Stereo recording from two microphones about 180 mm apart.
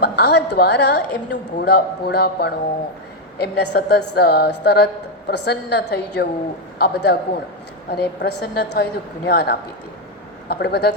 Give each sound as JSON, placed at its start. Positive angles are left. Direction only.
{"t": 0.0, "sound": "a woman's voice", "side_deg": 65}